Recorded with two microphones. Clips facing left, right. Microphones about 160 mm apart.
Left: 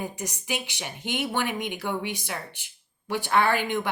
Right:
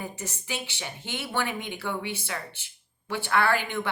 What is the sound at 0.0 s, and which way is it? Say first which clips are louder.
A woman's voice: left 3 dB; 15° left (ahead or behind).